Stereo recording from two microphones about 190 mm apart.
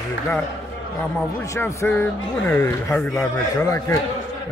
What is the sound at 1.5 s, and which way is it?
Speech, 15° left (ahead or behind).